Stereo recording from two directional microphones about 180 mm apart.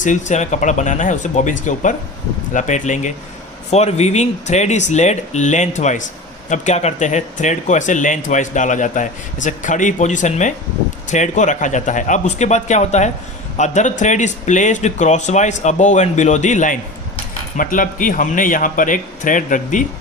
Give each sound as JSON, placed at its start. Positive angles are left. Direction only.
{"t": 0.0, "sound": "speech", "side_deg": 40}